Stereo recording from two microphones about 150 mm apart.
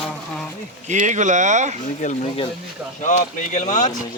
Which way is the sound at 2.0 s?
50° left (ahead or behind).